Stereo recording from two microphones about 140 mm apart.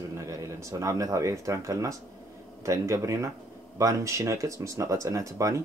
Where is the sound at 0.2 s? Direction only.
25° right (ahead or behind).